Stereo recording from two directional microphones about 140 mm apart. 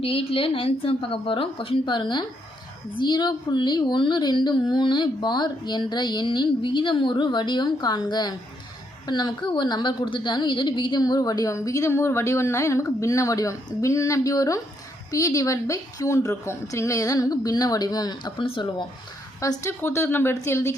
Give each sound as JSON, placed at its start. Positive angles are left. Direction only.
{"t": 0.0, "sound": "a woman's voice", "side_deg": 40}
{"t": 19.4, "sound": "a woman's voice", "side_deg": 20}